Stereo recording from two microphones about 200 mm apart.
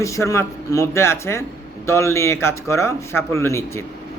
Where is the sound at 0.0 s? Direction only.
15° left (ahead or behind).